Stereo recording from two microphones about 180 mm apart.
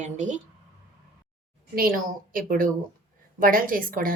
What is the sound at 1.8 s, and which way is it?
A woman's voice, 55° right (ahead or behind).